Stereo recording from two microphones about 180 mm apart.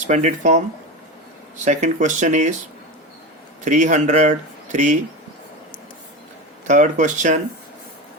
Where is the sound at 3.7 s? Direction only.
40° right (ahead or behind).